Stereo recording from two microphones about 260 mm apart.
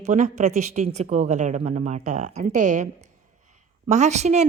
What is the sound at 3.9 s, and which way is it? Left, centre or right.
Speech, right.